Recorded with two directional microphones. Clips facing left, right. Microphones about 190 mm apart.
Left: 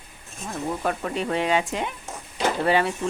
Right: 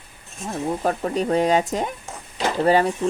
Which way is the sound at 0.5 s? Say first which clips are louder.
Right 3 dB; 35° right (ahead or behind).